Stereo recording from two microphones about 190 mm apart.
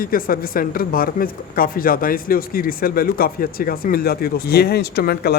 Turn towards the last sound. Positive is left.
turn(degrees=55)  # may be behind; listen again after turning